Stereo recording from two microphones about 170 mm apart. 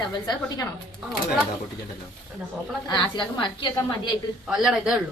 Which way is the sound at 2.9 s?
25° left (ahead or behind).